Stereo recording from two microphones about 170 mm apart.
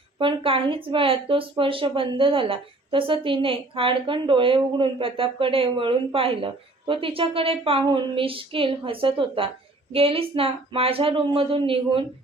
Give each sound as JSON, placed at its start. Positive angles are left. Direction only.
{"t": 0.2, "sound": "speech", "side_deg": -30}